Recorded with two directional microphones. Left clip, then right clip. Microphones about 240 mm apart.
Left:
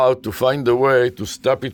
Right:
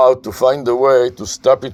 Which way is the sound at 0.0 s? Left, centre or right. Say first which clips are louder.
Right 5 dB; left.